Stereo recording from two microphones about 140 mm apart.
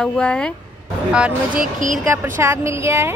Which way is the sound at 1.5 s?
75° right (ahead or behind).